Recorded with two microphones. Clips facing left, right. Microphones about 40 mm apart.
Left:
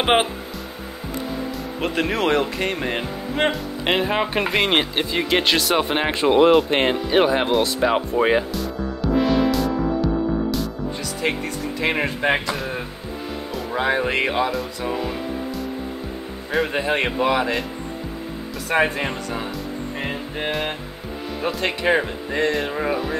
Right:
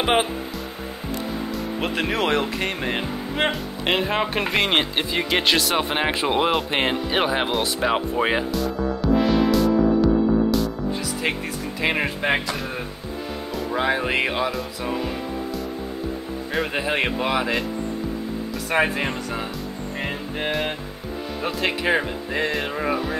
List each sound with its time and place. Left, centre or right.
0.0 s speech: centre
1.8 s speech: centre
13.7 s speech: centre
16.5 s speech: centre
18.7 s speech: centre